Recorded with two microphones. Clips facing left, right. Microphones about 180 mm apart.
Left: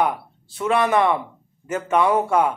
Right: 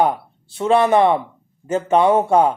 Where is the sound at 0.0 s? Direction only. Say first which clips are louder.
Right 4 dB; 25° right (ahead or behind).